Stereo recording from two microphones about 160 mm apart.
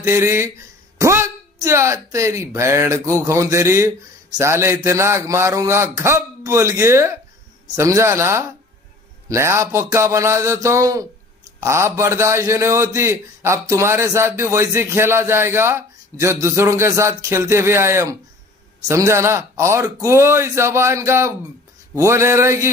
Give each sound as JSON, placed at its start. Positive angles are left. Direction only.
{"t": 0.0, "sound": "a man's voice", "side_deg": -15}